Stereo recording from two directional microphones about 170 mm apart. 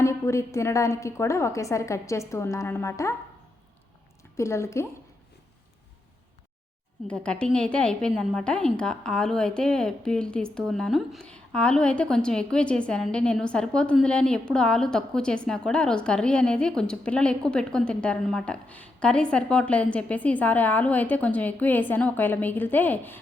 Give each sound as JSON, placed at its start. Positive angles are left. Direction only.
{"t": 0.0, "sound": "a woman's voice", "side_deg": 15}
{"t": 4.4, "sound": "a woman's voice", "side_deg": 15}
{"t": 7.1, "sound": "a woman's voice", "side_deg": 5}